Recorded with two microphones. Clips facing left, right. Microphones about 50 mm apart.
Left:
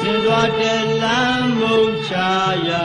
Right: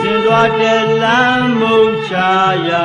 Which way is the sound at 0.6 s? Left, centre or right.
Right.